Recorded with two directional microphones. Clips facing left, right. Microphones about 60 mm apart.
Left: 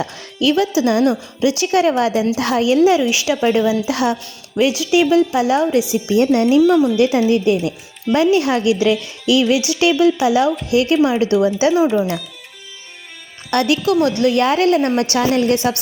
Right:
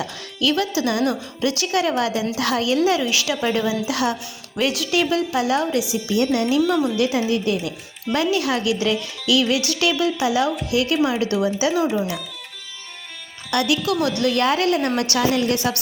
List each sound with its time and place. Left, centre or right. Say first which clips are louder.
0.0 s a woman's voice: left 5 dB; left
4.5 s speech: left 6 dB; centre
5.1 s a woman's voice: left 6 dB; left
13.5 s a woman's voice: left 5 dB; left